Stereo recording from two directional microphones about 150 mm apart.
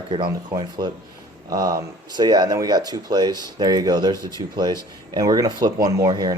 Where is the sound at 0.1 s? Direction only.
35° right (ahead or behind).